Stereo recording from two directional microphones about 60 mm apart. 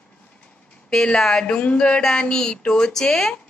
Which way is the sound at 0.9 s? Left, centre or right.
Centre.